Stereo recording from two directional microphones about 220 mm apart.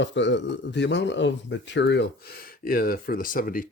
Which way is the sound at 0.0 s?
55° left (ahead or behind).